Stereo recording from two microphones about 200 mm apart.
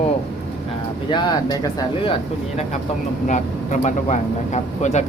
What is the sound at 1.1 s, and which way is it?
Speech, 20° left (ahead or behind).